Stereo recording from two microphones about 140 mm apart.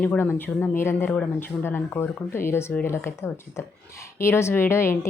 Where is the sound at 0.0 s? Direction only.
10° left (ahead or behind).